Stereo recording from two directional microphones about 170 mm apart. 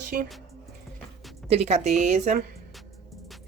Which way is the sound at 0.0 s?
55° right (ahead or behind).